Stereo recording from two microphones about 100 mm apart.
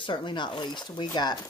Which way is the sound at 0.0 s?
50° left (ahead or behind).